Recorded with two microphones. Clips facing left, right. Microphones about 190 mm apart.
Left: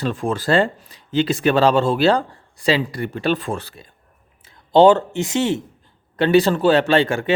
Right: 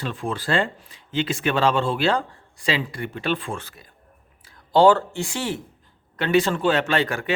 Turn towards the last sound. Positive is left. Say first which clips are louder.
# left 6 dB
turn(degrees=30)  # may be behind; listen again after turning